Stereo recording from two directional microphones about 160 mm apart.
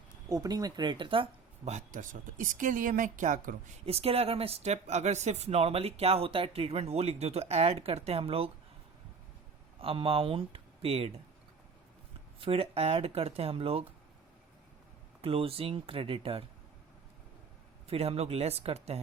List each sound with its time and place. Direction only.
0.3 s speech: 20° right (ahead or behind); by 3.5 s 50° right (ahead or behind)
3.8 s speech: 40° right (ahead or behind)
9.8 s speech: 35° right (ahead or behind)
12.4 s speech: 35° right (ahead or behind)
15.2 s speech: 35° right (ahead or behind)
17.8 s speech: 40° right (ahead or behind)